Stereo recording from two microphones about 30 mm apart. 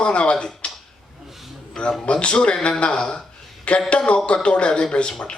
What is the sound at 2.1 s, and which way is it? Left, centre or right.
Speech, left.